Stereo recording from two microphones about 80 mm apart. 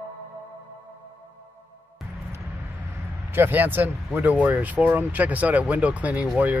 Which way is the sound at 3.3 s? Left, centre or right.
Right.